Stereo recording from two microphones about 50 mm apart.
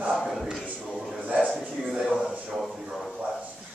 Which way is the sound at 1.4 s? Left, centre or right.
Centre.